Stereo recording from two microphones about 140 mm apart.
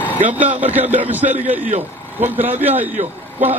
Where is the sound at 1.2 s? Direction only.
55° right (ahead or behind).